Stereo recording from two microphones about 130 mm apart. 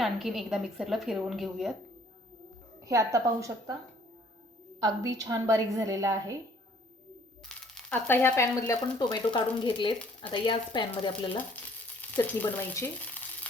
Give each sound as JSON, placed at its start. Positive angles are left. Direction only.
{"t": 0.0, "sound": "a woman's voice", "side_deg": 0}
{"t": 2.8, "sound": "a woman's voice", "side_deg": -25}
{"t": 4.8, "sound": "a woman's voice", "side_deg": -25}
{"t": 7.4, "sound": "a sound", "side_deg": 5}
{"t": 7.9, "sound": "speech", "side_deg": 15}
{"t": 9.0, "sound": "speech", "side_deg": 30}
{"t": 12.1, "sound": "frying", "side_deg": 15}